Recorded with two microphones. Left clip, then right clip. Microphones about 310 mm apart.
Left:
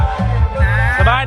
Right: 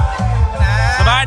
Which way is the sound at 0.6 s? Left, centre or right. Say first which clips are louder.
Even; right.